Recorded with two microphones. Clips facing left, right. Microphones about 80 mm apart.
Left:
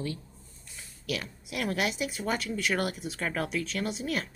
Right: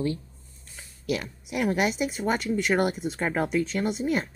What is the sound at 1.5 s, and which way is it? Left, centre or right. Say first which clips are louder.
Speech: right 5 dB; centre.